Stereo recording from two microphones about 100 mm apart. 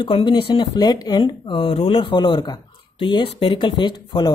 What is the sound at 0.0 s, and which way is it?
Speech, 55° left (ahead or behind).